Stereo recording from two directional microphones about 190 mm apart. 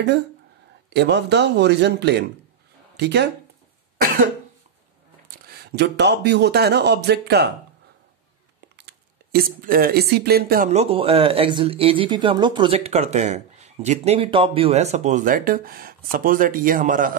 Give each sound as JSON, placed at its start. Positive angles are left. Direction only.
{"t": 0.8, "sound": "speech", "side_deg": -65}
{"t": 5.5, "sound": "speech", "side_deg": -55}
{"t": 8.7, "sound": "speech", "side_deg": -60}
{"t": 10.7, "sound": "speech", "side_deg": -35}